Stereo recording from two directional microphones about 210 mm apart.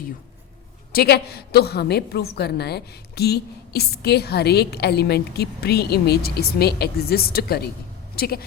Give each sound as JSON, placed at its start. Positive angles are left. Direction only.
{"t": 0.9, "sound": "a woman's voice", "side_deg": 50}